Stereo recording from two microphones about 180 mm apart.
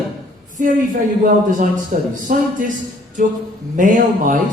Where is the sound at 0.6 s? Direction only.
45° right (ahead or behind).